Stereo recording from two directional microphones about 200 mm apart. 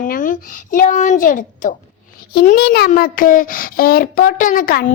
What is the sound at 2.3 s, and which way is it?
A child's voice, 50° left (ahead or behind).